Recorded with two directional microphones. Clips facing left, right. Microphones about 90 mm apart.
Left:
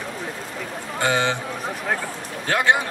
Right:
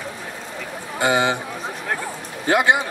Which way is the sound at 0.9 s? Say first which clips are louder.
Right 2 dB; 15° right (ahead or behind).